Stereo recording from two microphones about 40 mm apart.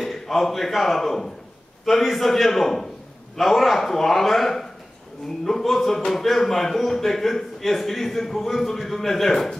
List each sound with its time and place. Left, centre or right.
0.0 s a man's voice: centre